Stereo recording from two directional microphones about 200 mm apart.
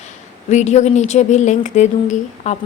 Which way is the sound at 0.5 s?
35° left (ahead or behind).